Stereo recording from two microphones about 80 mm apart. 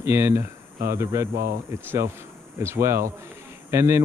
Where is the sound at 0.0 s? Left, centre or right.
Right.